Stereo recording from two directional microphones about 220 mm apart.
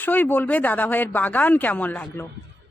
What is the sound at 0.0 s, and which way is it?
A woman's voice, 10° left (ahead or behind).